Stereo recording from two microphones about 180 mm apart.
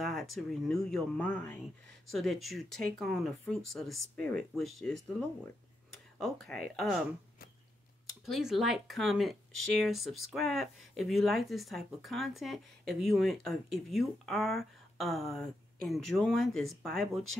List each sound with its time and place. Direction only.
0.0 s speech: centre (ahead or behind)
6.1 s speech: 5° left (ahead or behind)
8.3 s speech: centre (ahead or behind)